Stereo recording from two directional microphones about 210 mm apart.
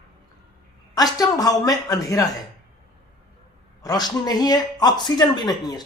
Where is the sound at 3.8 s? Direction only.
20° left (ahead or behind).